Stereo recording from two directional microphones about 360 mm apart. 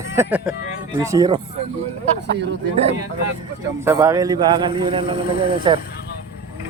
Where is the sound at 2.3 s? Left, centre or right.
Right.